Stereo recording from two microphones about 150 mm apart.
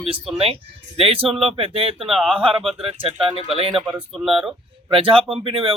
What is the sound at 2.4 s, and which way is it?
Speech, 35° right (ahead or behind).